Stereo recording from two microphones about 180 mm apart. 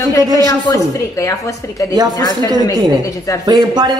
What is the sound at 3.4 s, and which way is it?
Speech, 20° right (ahead or behind).